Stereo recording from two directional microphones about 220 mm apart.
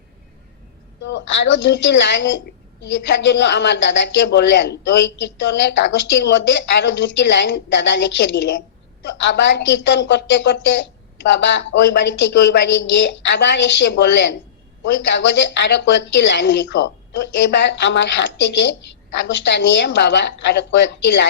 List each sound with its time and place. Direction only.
1.0 s a woman's voice: 55° left (ahead or behind)